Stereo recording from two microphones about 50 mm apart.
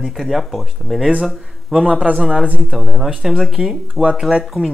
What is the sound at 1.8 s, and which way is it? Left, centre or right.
A man's voice, right.